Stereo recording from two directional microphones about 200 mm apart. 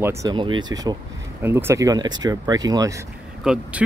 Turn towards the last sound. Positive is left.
turn(degrees=-5)  # may be behind; listen again after turning